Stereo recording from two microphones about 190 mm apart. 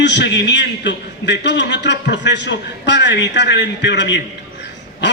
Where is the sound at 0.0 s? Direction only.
65° left (ahead or behind).